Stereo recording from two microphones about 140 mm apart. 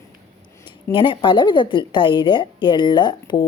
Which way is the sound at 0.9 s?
35° left (ahead or behind).